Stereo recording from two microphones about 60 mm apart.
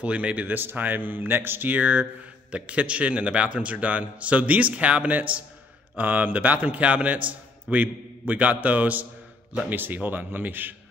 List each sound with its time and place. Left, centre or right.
0.0 s a man's voice: right
0.6 s a man's voice: right